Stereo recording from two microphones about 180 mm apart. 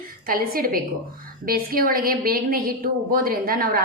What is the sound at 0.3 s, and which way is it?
A woman's voice, 55° right (ahead or behind).